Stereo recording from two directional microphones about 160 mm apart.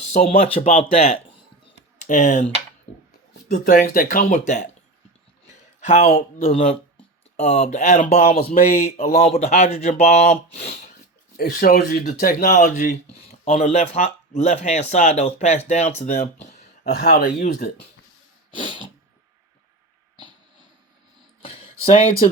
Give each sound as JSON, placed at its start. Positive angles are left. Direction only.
{"t": 0.1, "sound": "speech", "side_deg": 45}
{"t": 2.0, "sound": "speech", "side_deg": 55}
{"t": 3.5, "sound": "speech", "side_deg": 70}
{"t": 5.8, "sound": "speech", "side_deg": 50}
{"t": 6.4, "sound": "speech", "side_deg": 40}
{"t": 11.3, "sound": "speech", "side_deg": 65}
{"t": 16.8, "sound": "speech", "side_deg": 75}
{"t": 18.5, "sound": "dog", "side_deg": 30}
{"t": 21.4, "sound": "a sound", "side_deg": 35}